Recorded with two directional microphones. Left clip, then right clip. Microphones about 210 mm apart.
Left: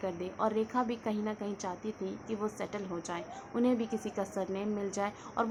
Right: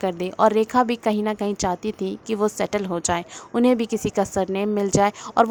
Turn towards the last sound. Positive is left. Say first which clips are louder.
# right 15 dB
turn(degrees=-50)  # may be behind; listen again after turning